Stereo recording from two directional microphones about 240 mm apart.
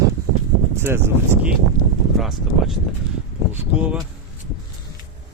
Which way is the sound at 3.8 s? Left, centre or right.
Centre.